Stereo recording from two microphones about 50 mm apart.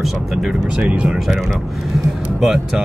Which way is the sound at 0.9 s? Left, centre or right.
Right.